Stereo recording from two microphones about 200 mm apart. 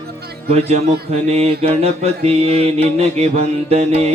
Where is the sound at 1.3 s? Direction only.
30° right (ahead or behind).